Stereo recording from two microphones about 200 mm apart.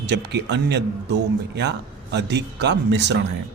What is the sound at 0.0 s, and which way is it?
Speech, 55° right (ahead or behind).